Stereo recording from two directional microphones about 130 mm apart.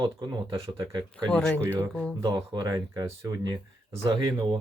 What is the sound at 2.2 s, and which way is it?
Speech, 30° right (ahead or behind).